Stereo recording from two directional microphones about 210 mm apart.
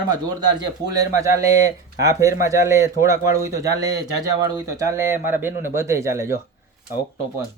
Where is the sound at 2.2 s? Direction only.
15° right (ahead or behind).